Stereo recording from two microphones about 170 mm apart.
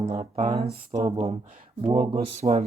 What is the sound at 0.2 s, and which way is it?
Speech, 35° right (ahead or behind).